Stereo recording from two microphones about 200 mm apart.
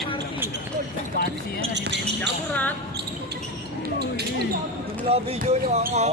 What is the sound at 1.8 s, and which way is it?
Basketball bounce, 60° right (ahead or behind).